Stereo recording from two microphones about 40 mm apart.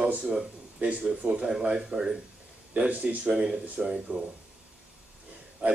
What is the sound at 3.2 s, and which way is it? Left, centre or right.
Speech, centre.